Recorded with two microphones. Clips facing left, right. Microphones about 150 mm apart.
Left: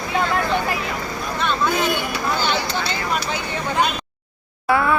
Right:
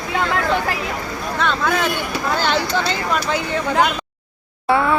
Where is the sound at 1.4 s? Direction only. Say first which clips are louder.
Right 1 dB; 90° right.